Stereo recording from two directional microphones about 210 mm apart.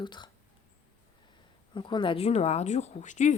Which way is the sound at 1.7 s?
20° left (ahead or behind).